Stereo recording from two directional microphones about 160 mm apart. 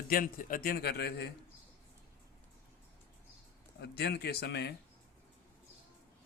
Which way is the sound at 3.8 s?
90° left.